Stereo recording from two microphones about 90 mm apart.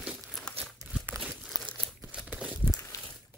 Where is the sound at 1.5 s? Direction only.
50° left (ahead or behind).